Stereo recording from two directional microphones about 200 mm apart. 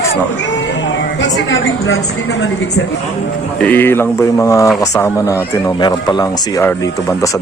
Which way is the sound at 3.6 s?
10° left (ahead or behind).